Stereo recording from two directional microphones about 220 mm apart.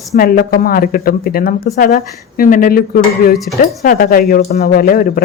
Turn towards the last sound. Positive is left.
turn(degrees=40)  # may be behind; listen again after turning